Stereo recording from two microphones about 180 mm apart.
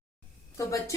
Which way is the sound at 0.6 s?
15° left (ahead or behind).